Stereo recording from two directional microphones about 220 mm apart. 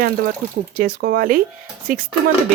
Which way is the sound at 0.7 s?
40° right (ahead or behind).